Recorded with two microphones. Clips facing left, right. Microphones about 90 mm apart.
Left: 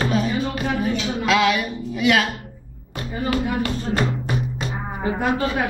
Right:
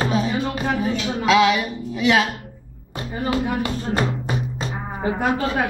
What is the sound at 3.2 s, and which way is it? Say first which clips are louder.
Speech: even; 20° right (ahead or behind).